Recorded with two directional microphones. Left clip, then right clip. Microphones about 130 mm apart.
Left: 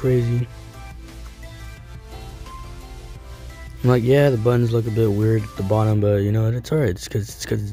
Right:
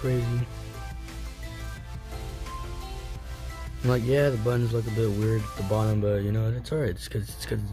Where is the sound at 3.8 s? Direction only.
55° left (ahead or behind).